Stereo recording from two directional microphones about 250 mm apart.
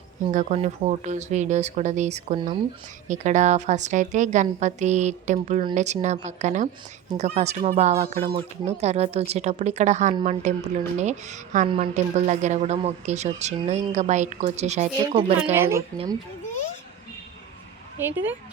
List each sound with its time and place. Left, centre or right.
0.3 s speech: right
8.1 s speech: right
15.5 s speech: centre
18.0 s speech: centre